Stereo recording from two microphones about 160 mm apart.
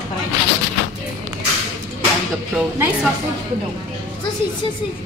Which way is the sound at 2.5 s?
5° right (ahead or behind).